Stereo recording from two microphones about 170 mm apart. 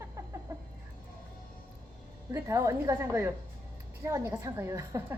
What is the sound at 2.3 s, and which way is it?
A woman's voice, 15° right (ahead or behind).